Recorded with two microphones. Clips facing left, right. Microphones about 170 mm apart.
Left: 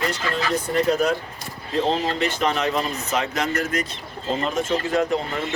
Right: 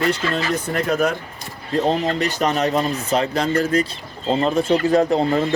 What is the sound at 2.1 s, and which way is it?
Speech, 40° right (ahead or behind).